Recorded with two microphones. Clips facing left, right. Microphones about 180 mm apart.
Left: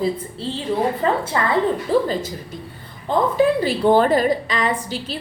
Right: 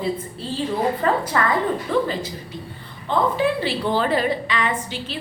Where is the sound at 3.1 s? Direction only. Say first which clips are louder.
Left 3 dB; 45° left (ahead or behind).